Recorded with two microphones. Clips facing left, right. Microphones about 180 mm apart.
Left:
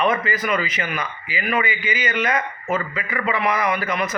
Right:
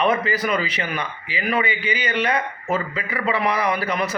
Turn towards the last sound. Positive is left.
turn(degrees=-35)  # may be behind; listen again after turning